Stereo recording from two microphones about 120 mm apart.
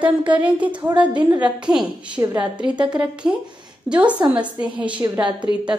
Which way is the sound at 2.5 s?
10° right (ahead or behind).